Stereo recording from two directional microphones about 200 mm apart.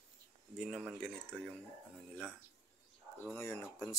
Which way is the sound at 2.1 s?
5° left (ahead or behind).